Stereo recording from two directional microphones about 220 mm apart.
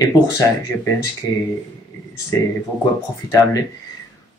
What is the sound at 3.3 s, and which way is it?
Speech, 15° left (ahead or behind).